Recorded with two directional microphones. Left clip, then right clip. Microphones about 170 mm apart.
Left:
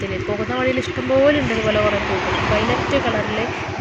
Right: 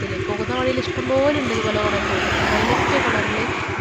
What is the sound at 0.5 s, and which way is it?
Speech, 5° left (ahead or behind).